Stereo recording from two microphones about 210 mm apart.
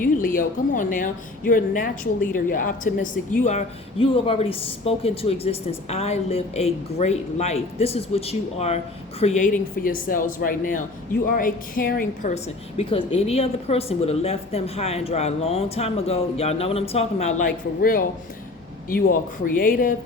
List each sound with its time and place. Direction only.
0.0 s a woman's voice: 40° left (ahead or behind)
19.5 s a woman's voice: 40° left (ahead or behind)